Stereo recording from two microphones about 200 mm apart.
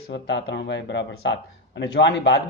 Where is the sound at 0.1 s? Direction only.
60° left (ahead or behind).